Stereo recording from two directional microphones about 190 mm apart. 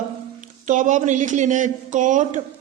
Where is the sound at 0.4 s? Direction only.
40° right (ahead or behind).